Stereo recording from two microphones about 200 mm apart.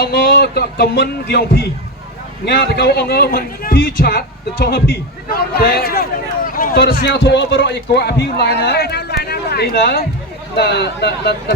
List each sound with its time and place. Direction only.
0.0 s a man's voice: 55° left (ahead or behind)